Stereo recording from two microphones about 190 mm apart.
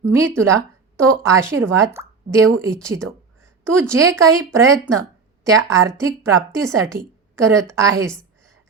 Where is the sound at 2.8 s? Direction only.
15° right (ahead or behind).